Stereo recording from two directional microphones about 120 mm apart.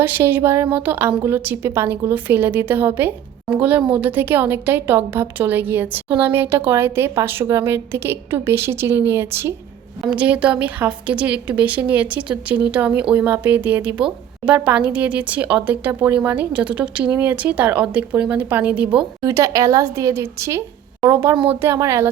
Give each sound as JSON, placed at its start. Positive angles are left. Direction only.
{"t": 0.0, "sound": "a woman's voice", "side_deg": -15}
{"t": 19.2, "sound": "a woman's voice", "side_deg": -25}